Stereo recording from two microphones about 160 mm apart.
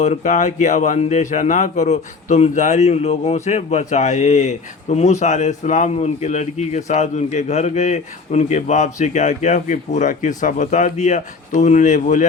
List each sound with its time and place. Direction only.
0.0 s speech: 45° left (ahead or behind)